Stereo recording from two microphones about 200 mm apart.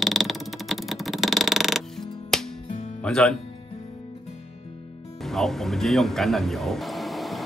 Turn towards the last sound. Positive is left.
turn(degrees=0)  # may be behind; listen again after turning